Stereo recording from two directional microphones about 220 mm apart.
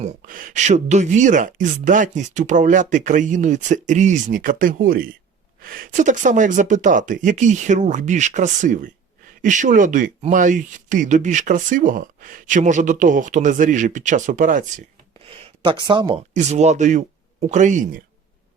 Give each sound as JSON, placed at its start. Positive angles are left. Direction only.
{"t": 0.0, "sound": "speech", "side_deg": -40}
{"t": 15.3, "sound": "speech", "side_deg": -25}